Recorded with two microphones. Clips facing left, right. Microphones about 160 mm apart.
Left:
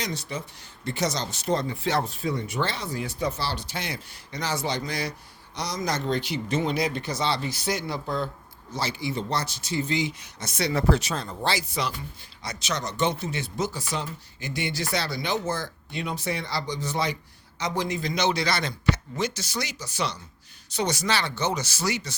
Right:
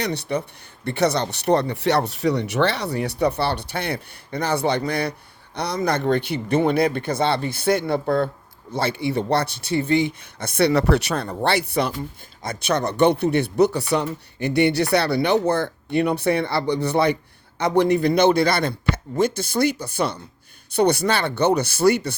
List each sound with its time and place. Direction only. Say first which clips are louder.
0.0 s speech: right 8 dB; 65° right (ahead or behind)